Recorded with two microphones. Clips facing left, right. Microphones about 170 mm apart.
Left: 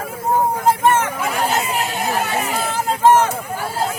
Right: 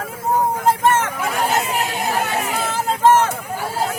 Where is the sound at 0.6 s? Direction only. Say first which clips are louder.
Left 1 dB; 5° left (ahead or behind).